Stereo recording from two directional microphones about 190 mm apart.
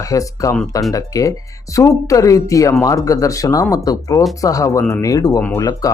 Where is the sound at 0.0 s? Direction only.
15° left (ahead or behind).